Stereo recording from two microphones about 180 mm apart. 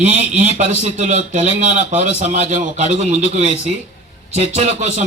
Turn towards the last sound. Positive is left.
turn(degrees=-40)  # may be behind; listen again after turning